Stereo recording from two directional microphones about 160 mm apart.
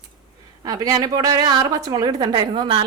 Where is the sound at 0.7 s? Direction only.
25° right (ahead or behind).